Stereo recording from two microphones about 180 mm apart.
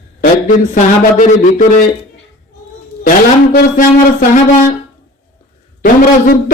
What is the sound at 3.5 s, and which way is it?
Speech, 50° left (ahead or behind).